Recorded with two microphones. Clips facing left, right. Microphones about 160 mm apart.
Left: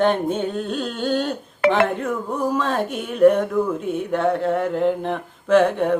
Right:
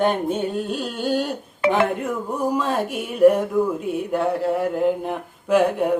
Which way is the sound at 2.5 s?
10° right (ahead or behind).